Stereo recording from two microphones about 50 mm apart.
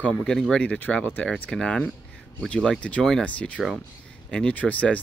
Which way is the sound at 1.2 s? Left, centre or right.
Left.